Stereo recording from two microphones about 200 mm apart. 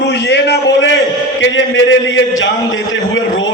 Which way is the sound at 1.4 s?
70° left (ahead or behind).